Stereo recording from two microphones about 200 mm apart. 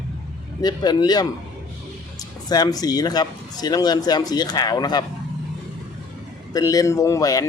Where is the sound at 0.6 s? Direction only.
20° left (ahead or behind).